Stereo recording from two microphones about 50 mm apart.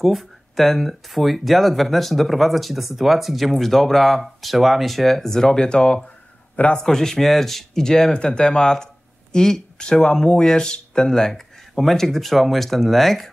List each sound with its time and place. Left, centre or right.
0.0 s a man's voice: centre; by 6.8 s left
6.8 s speech: centre